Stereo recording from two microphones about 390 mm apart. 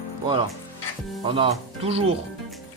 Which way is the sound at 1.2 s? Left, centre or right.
Centre.